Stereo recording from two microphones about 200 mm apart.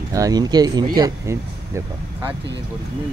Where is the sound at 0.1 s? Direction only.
20° right (ahead or behind).